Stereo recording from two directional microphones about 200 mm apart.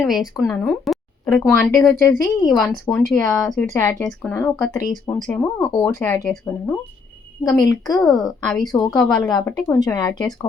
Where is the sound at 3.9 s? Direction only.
5° left (ahead or behind).